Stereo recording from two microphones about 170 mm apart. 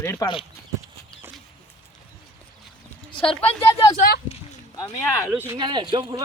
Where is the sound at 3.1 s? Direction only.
30° left (ahead or behind).